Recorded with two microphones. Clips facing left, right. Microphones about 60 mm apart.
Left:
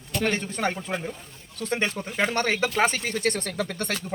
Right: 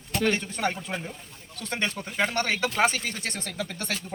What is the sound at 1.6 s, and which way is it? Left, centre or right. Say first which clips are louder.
Speech: left 3 dB; centre.